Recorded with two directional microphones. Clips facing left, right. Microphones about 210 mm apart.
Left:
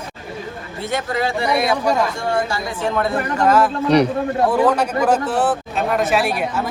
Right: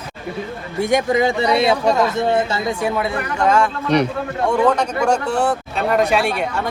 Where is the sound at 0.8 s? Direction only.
15° right (ahead or behind).